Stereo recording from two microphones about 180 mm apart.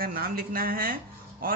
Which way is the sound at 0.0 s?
55° right (ahead or behind).